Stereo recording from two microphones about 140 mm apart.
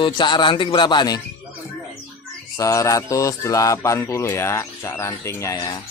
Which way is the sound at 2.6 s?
25° left (ahead or behind).